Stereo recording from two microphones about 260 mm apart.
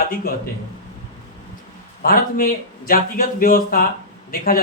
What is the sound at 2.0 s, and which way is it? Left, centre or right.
A man's voice, left.